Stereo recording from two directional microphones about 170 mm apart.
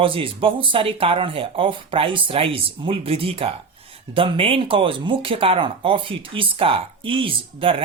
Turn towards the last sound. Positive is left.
turn(degrees=-30)  # may be behind; listen again after turning